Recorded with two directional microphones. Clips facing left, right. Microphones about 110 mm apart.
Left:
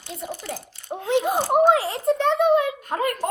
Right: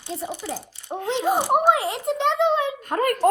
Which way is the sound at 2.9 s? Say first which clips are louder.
Right 4 dB; 50° right (ahead or behind).